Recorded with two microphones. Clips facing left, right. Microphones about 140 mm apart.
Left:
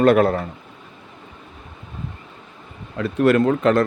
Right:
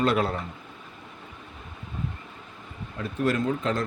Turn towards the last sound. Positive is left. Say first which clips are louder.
# left 10 dB
turn(degrees=70)  # may be behind; listen again after turning